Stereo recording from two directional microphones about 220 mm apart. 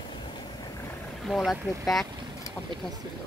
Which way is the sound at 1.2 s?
Centre (ahead or behind).